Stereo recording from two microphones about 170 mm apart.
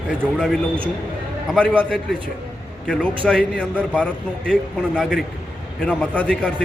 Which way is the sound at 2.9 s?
5° left (ahead or behind).